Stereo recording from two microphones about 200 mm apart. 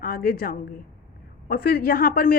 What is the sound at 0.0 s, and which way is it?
A woman's voice, 45° left (ahead or behind).